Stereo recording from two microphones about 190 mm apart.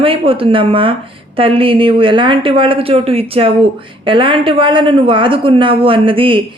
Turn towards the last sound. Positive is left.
turn(degrees=-25)  # may be behind; listen again after turning